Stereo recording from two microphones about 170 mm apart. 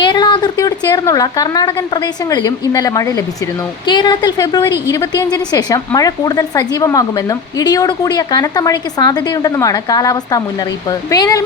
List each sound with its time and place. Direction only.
0.0 s a woman's voice: 25° left (ahead or behind)